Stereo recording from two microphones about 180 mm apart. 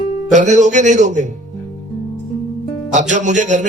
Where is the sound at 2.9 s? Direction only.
40° right (ahead or behind).